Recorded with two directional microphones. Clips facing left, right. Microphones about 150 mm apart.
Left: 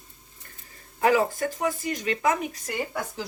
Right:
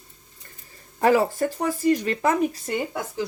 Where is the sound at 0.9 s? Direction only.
35° right (ahead or behind).